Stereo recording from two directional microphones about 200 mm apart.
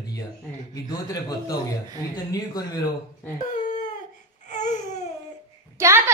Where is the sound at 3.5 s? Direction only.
35° left (ahead or behind).